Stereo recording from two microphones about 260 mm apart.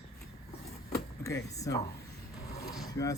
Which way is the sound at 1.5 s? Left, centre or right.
Centre.